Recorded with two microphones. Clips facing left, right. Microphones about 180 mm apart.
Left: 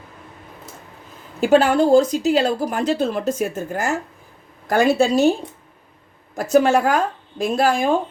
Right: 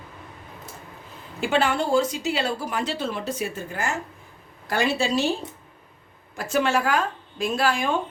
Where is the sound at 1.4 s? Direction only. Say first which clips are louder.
Left 8 dB; 40° left (ahead or behind).